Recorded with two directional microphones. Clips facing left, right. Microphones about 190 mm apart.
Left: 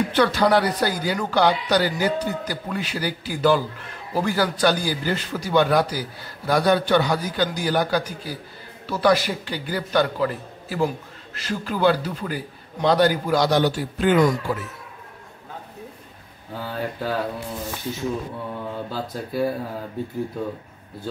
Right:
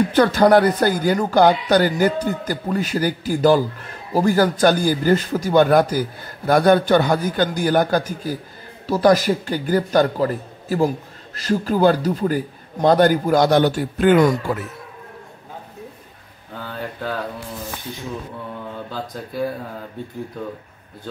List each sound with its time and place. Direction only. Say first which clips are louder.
0.1 s speech: right 5 dB; 45° right (ahead or behind)
16.5 s speech: left 2 dB; 5° left (ahead or behind)
18.9 s speech: left 1 dB; 5° left (ahead or behind)